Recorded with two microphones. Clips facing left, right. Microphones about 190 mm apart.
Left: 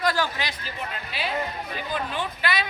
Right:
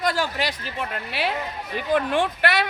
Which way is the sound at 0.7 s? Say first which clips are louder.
Right 5 dB; 70° right (ahead or behind).